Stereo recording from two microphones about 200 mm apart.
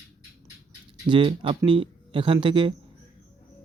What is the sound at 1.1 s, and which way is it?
Speech, 25° right (ahead or behind).